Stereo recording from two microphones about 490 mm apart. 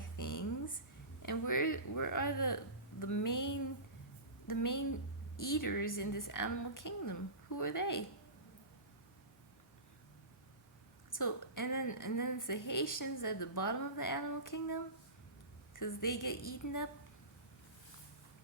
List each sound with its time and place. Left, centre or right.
0.2 s a sound: left
1.2 s a woman's voice: left
11.1 s a woman's voice: left